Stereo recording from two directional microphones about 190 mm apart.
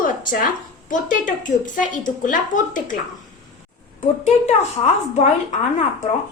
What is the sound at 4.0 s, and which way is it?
Speech, 35° left (ahead or behind).